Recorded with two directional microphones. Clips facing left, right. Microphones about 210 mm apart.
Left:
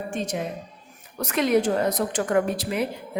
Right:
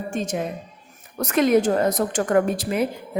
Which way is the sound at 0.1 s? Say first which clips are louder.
Right 4 dB; 45° right (ahead or behind).